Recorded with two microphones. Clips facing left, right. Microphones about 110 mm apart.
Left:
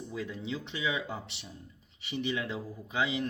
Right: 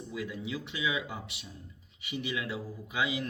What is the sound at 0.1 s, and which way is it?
A man's voice, 30° left (ahead or behind).